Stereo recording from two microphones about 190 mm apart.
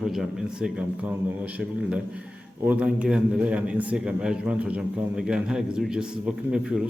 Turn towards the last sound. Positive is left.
turn(degrees=-5)  # may be behind; listen again after turning